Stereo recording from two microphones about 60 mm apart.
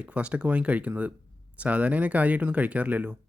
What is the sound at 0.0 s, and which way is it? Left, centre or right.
Speech, centre.